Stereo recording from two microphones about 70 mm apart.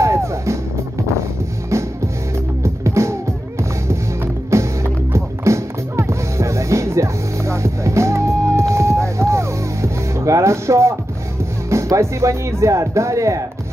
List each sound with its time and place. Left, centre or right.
0.0 s music: right
2.6 s music: right
4.5 s music: right
11.7 s speech: right